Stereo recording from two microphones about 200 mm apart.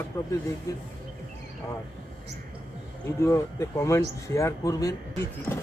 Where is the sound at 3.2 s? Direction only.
15° left (ahead or behind).